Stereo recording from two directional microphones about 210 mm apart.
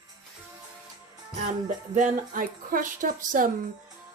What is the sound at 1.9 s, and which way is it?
Speech, 40° right (ahead or behind).